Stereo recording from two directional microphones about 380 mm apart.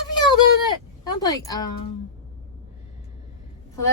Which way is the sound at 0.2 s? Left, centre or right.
Centre.